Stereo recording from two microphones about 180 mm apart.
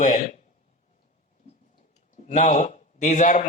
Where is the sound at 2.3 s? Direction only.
40° left (ahead or behind).